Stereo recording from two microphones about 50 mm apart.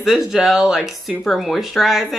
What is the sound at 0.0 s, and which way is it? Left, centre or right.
A woman's voice, centre.